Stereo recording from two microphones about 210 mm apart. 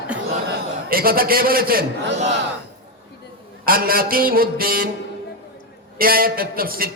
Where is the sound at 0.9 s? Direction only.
45° right (ahead or behind).